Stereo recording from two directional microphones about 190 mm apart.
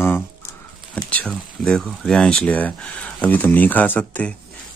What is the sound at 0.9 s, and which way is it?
Speech, 5° left (ahead or behind).